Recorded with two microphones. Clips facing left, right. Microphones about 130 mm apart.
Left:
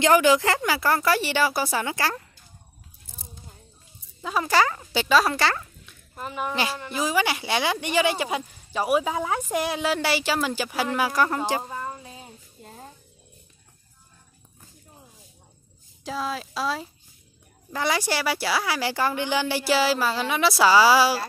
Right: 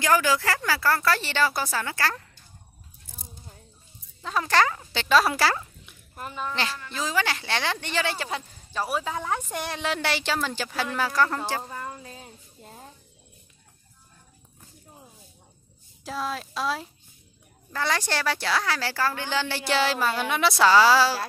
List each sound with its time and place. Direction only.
0.0 s speech: 20° left (ahead or behind)
4.2 s a woman's voice: 10° left (ahead or behind)
6.3 s speech: 10° left (ahead or behind)
16.0 s a woman's voice: centre (ahead or behind)
17.6 s speech: 15° left (ahead or behind)